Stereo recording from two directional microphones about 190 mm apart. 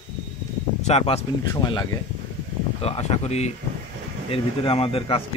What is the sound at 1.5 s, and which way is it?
Speech, 20° left (ahead or behind).